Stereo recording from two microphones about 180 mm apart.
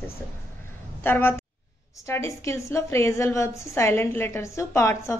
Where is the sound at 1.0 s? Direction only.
10° left (ahead or behind).